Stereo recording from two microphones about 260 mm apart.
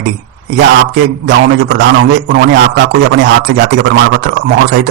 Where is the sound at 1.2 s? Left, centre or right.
Right.